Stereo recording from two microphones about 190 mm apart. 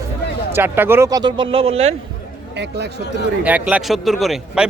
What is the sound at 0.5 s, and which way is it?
Speech, 10° right (ahead or behind).